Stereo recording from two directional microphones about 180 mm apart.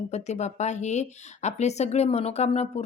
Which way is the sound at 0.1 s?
40° left (ahead or behind).